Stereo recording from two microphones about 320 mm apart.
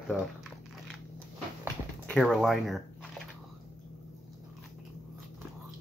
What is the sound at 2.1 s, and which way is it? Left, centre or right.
Speech, centre.